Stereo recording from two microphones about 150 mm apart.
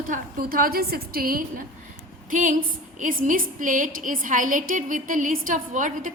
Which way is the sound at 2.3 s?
60° right (ahead or behind).